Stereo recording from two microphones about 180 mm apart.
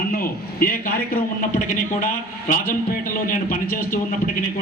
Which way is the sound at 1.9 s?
50° left (ahead or behind).